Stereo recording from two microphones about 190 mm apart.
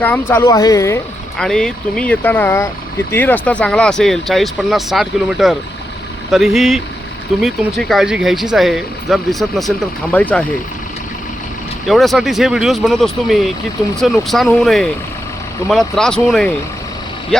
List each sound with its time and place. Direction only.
0.0 s speech: 10° left (ahead or behind)
1.4 s speech: 5° left (ahead or behind)
11.9 s speech: centre (ahead or behind)